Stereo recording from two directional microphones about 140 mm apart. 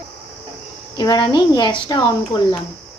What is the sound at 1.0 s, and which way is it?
A woman's voice, 30° left (ahead or behind).